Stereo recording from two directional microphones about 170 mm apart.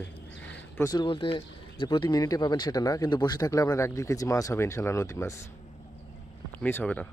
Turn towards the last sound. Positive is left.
turn(degrees=10)  # may be behind; listen again after turning